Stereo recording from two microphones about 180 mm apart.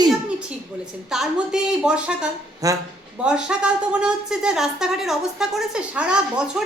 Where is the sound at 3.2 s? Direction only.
5° right (ahead or behind).